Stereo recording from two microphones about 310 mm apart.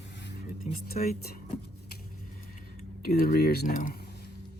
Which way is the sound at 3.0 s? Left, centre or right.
Left.